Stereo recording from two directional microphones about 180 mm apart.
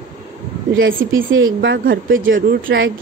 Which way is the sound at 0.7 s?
90° right.